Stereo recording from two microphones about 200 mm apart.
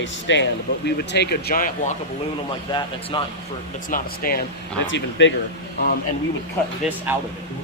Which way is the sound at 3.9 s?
45° left (ahead or behind).